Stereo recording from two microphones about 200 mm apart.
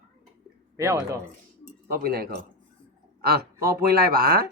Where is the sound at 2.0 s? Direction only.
50° right (ahead or behind).